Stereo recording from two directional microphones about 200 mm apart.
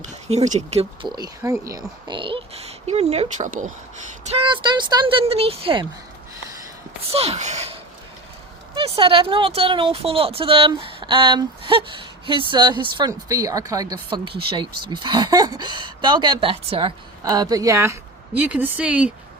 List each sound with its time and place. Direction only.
0.0 s speech: 35° right (ahead or behind)
4.3 s speech: 25° right (ahead or behind)
7.1 s speech: 30° right (ahead or behind); by 19.1 s 5° right (ahead or behind)